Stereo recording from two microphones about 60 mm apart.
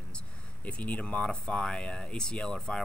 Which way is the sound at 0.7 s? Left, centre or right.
Left.